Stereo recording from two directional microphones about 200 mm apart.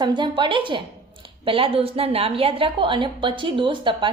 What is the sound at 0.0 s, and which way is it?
A woman's voice, 25° right (ahead or behind).